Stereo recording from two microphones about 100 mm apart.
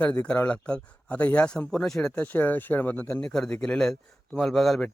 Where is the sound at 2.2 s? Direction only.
20° left (ahead or behind).